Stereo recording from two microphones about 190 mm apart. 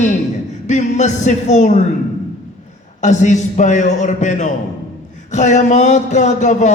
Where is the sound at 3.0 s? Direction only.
40° left (ahead or behind).